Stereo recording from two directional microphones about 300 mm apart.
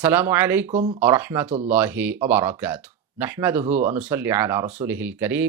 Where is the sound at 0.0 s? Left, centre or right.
Centre.